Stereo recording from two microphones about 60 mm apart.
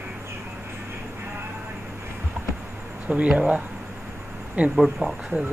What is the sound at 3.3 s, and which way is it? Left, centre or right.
Speech, centre.